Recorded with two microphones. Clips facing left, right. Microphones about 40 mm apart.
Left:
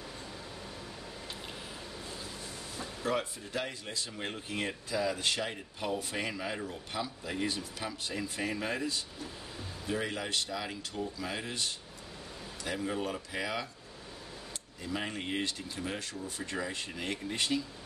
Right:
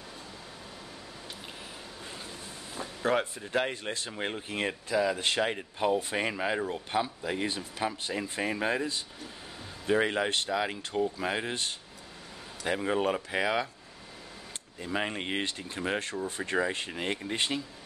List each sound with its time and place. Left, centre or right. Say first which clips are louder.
3.0 s speech: right 5 dB; right
4.3 s speech: right 4 dB; right
14.8 s speech: right 4 dB; right